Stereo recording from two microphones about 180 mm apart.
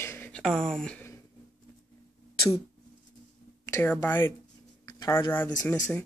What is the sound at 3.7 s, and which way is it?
Speech, 15° left (ahead or behind).